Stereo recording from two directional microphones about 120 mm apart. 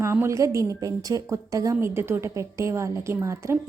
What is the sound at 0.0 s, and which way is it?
A woman's voice, 20° right (ahead or behind).